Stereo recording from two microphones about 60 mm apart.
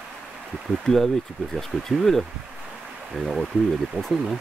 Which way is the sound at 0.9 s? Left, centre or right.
Centre.